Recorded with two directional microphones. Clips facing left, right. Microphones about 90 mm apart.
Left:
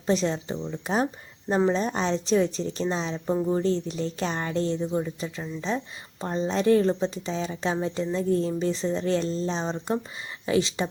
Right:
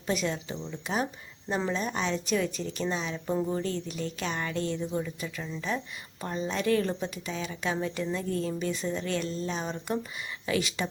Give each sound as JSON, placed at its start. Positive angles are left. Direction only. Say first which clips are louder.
{"t": 0.1, "sound": "a woman's voice", "louder": "left 5 dB", "side_deg": 30}